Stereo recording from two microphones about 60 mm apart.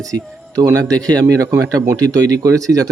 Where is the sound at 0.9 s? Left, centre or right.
Right.